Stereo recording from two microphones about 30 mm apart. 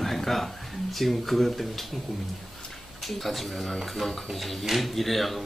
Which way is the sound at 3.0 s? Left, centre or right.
Centre.